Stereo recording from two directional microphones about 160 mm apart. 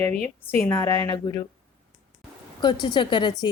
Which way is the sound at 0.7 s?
20° left (ahead or behind).